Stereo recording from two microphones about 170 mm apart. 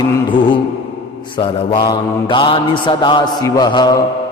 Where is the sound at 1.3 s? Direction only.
30° left (ahead or behind).